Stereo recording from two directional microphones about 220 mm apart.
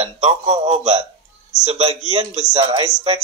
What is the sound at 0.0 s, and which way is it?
Speech, 30° right (ahead or behind).